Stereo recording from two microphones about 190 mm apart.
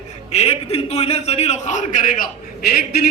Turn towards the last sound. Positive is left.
turn(degrees=50)  # may be behind; listen again after turning